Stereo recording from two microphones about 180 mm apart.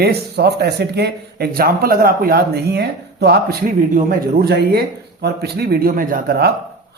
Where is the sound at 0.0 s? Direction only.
65° right (ahead or behind).